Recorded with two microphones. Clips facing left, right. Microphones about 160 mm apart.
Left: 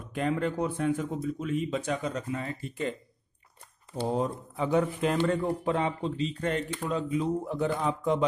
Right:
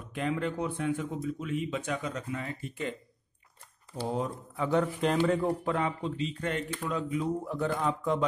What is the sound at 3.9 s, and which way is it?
Speech, 20° left (ahead or behind).